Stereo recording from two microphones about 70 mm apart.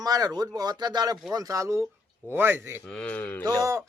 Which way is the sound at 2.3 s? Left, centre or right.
Right.